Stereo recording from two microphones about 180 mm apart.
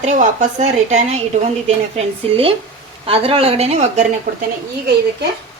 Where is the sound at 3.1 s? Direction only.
30° right (ahead or behind).